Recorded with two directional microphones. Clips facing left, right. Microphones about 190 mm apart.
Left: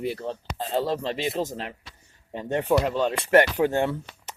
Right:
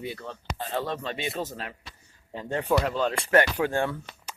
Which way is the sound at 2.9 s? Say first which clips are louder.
Left 2 dB; 5° left (ahead or behind).